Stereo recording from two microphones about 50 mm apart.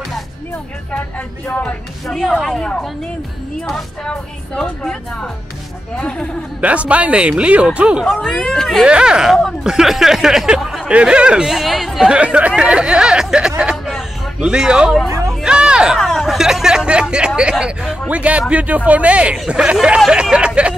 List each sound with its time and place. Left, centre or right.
2.0 s speech: centre
3.7 s speech: centre
6.6 s speech: right
8.0 s speech: centre
8.8 s speech: centre
9.3 s speech: centre
10.9 s speech: right
11.4 s speech: centre
12.1 s speech: right
15.4 s a sound: centre
16.0 s hubbub: centre
16.3 s speech: centre; by 19.3 s right
19.3 s speech: centre